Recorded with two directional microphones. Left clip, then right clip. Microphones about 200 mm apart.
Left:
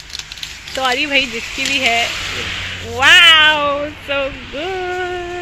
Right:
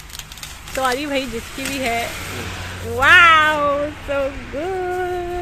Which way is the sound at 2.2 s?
45° right (ahead or behind).